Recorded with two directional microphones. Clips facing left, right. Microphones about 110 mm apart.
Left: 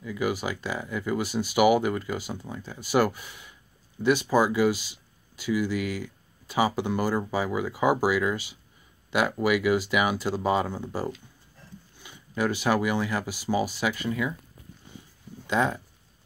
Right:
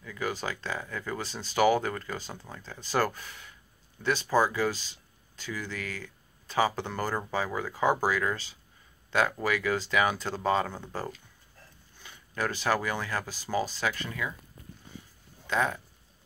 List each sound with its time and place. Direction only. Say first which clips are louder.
0.0 s speech: left 5 dB; 15° left (ahead or behind)
15.4 s speech: left 3 dB; 20° left (ahead or behind)